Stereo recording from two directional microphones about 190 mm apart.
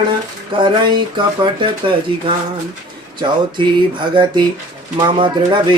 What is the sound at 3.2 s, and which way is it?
Speech, 25° right (ahead or behind).